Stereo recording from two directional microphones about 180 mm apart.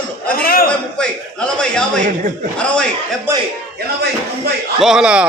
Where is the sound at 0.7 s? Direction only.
5° left (ahead or behind).